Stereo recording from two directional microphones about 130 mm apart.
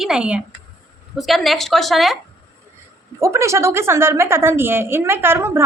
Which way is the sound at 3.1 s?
20° right (ahead or behind).